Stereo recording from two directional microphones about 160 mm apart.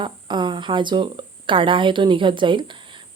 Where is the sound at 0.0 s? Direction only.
30° right (ahead or behind).